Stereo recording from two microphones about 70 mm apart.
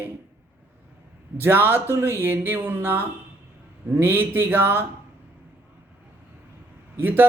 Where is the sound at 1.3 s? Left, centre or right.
Right.